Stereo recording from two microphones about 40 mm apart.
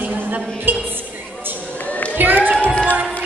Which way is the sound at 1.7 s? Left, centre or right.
Left.